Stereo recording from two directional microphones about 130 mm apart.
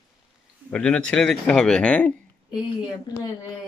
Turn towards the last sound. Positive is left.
turn(degrees=35)  # may be behind; listen again after turning